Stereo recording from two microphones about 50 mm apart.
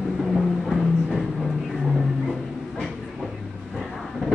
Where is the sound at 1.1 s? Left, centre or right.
Centre.